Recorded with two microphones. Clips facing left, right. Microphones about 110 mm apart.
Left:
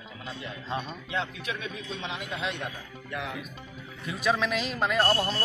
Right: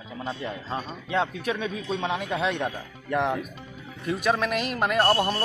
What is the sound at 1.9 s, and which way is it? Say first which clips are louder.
Speech: right 9 dB; 50° right (ahead or behind).